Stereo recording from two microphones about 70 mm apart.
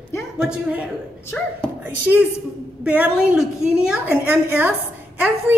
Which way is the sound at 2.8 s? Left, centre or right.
Right.